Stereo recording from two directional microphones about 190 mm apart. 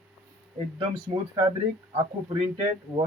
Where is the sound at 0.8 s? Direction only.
25° right (ahead or behind).